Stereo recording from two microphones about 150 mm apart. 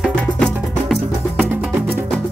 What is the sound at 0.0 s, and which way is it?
Music, centre (ahead or behind).